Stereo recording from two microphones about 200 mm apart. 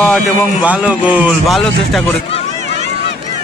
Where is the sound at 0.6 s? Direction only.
5° right (ahead or behind).